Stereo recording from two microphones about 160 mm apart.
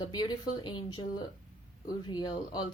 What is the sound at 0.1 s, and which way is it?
Speech, 25° left (ahead or behind).